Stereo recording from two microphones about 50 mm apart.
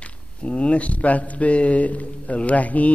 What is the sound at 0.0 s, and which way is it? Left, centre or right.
Speech, left.